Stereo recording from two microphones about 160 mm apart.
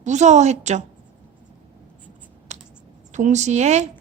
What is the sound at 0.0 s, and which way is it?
Speech, 45° right (ahead or behind).